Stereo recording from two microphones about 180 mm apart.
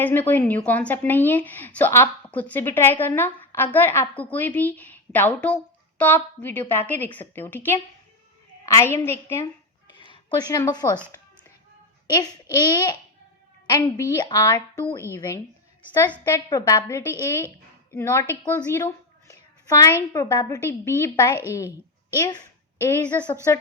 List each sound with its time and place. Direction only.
0.0 s a woman's voice: 10° left (ahead or behind)
12.2 s a woman's voice: 20° left (ahead or behind)
22.9 s speech: 10° left (ahead or behind)